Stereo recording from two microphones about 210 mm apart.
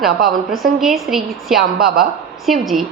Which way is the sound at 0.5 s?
Centre (ahead or behind).